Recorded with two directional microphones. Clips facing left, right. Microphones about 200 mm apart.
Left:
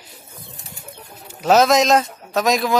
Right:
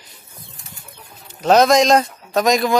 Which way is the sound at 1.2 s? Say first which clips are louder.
Right 1 dB; 5° left (ahead or behind).